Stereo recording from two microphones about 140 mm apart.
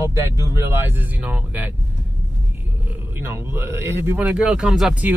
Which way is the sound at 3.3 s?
15° right (ahead or behind).